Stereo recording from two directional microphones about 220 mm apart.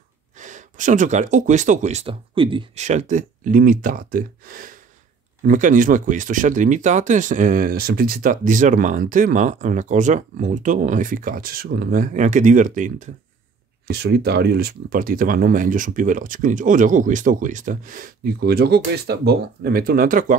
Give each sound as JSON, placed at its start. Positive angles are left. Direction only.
{"t": 0.4, "sound": "speech", "side_deg": -35}
{"t": 13.8, "sound": "speech", "side_deg": -50}